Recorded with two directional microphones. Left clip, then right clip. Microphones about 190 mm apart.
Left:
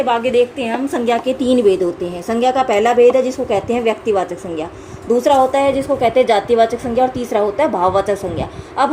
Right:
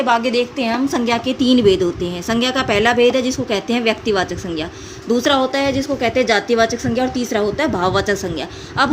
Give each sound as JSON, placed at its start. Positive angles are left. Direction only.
{"t": 0.0, "sound": "a woman's voice", "side_deg": -50}
{"t": 0.9, "sound": "a woman's voice", "side_deg": -35}